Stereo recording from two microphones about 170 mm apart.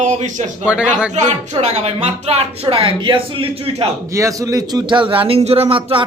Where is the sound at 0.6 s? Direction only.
5° right (ahead or behind).